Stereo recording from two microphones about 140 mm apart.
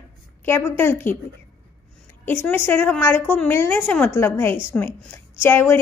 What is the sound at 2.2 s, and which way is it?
A woman's voice, 15° left (ahead or behind).